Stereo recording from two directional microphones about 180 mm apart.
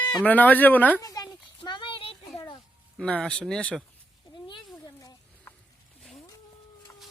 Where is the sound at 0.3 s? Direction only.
10° left (ahead or behind).